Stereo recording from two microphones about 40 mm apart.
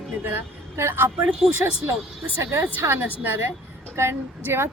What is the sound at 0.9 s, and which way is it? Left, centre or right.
Speech, right.